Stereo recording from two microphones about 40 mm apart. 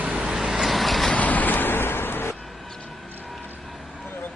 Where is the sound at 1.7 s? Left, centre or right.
Left.